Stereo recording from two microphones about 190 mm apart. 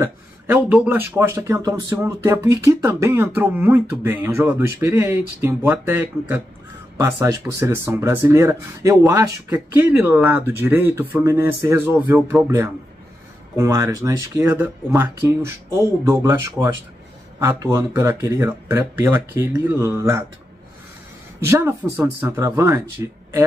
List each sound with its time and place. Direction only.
0.0 s speech: 10° right (ahead or behind)
21.5 s speech: 10° right (ahead or behind)